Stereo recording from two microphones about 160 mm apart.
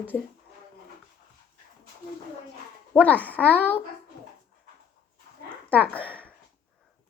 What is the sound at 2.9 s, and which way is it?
Speech, 10° left (ahead or behind).